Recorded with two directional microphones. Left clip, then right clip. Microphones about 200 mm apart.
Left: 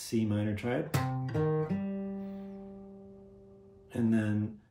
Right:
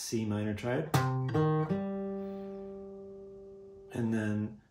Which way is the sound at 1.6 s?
20° right (ahead or behind).